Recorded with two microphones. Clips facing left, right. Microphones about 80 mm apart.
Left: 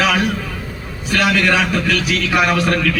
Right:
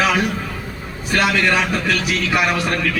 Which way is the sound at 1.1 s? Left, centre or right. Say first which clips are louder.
Left 1 dB; right.